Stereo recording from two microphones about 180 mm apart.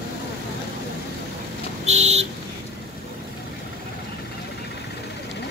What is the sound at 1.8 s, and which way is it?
Vehicle, 40° right (ahead or behind).